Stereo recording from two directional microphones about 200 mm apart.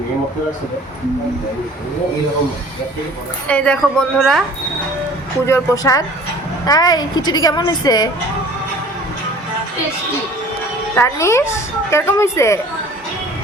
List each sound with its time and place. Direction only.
3.5 s a woman's voice: 5° left (ahead or behind)
5.5 s a woman's voice: 15° left (ahead or behind)
10.9 s a woman's voice: 15° left (ahead or behind)